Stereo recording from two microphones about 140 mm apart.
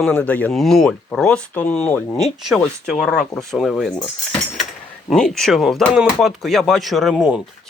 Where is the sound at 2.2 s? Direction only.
Centre (ahead or behind).